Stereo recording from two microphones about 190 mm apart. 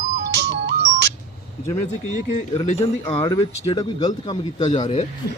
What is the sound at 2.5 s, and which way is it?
Speech, 25° left (ahead or behind).